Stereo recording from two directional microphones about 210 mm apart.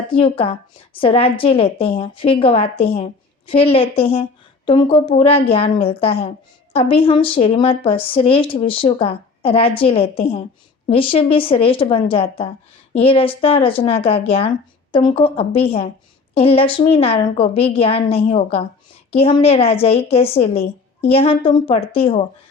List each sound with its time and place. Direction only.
0.1 s a woman's voice: 25° left (ahead or behind)